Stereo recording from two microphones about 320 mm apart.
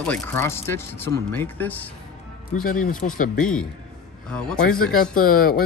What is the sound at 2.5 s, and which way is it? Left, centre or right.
Speech, left.